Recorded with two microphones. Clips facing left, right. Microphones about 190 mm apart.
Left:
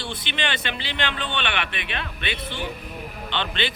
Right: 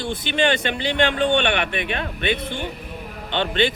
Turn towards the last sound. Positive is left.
turn(degrees=-45)  # may be behind; listen again after turning